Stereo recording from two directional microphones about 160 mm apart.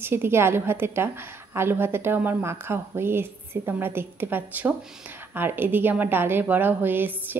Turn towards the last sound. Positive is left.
turn(degrees=-10)  # may be behind; listen again after turning